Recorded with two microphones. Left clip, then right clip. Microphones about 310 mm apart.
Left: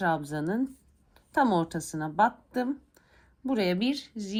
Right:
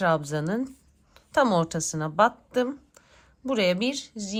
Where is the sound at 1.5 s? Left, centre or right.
Right.